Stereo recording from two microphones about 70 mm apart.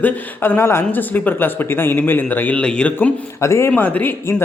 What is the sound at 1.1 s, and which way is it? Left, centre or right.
Speech, left.